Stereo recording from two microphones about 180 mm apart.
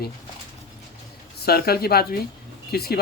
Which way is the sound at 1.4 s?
60° left (ahead or behind).